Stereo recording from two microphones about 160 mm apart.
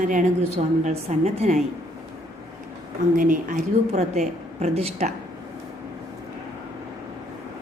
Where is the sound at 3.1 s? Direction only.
55° right (ahead or behind).